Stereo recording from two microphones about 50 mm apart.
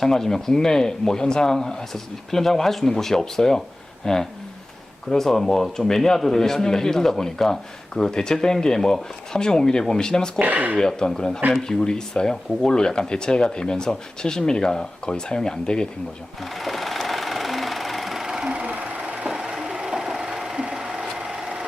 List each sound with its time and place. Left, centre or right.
0.0 s speech: centre
10.3 s speech: right
10.8 s speech: centre
16.4 s sewing machine: centre; by 18.8 s right
18.9 s a sound: right